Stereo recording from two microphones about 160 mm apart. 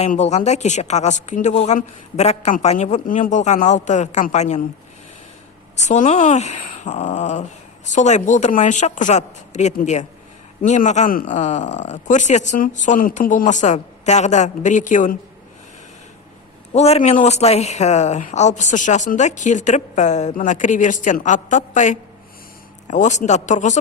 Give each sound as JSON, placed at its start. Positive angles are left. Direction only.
{"t": 0.1, "sound": "speech", "side_deg": 45}
{"t": 5.7, "sound": "speech", "side_deg": 45}
{"t": 16.7, "sound": "speech", "side_deg": 40}